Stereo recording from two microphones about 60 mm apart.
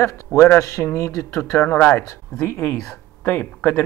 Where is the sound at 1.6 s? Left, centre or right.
Left.